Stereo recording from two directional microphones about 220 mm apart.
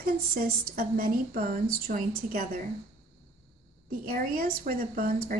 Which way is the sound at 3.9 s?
45° right (ahead or behind).